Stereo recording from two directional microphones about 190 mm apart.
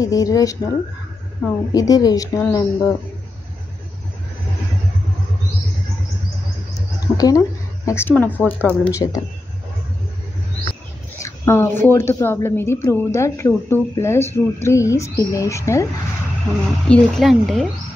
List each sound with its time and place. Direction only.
0.0 s speech: 20° left (ahead or behind)
7.2 s a woman's voice: 20° left (ahead or behind)
11.1 s a sound: 15° left (ahead or behind)
11.8 s a woman's voice: 10° left (ahead or behind)
16.8 s speech: centre (ahead or behind)